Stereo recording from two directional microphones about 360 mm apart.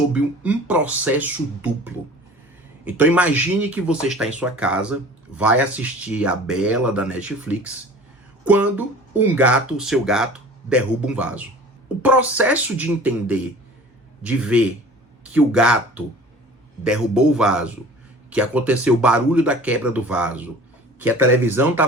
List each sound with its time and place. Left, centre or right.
0.1 s speech: centre